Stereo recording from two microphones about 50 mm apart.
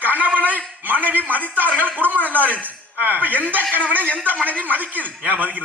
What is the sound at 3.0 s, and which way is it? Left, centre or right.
Speech, right.